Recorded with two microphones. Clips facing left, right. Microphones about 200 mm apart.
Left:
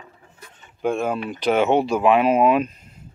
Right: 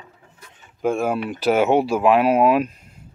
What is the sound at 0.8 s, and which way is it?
Speech, centre (ahead or behind).